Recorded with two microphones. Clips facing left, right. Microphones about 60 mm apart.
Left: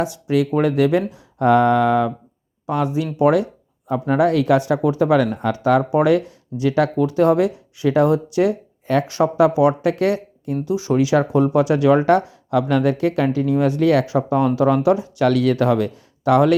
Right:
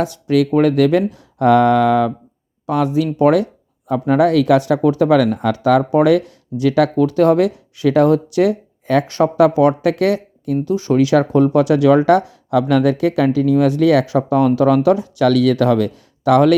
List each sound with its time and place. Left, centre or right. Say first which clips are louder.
0.0 s speech: right 3 dB; right
3.2 s speech: right 2 dB; right
3.8 s speech: right 3 dB; right
5.6 s speech: right 3 dB; right
9.0 s speech: right 2 dB; right
10.7 s speech: right 3 dB; right
12.5 s speech: right 3 dB; right